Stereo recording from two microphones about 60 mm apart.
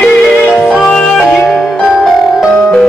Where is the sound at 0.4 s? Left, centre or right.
Left.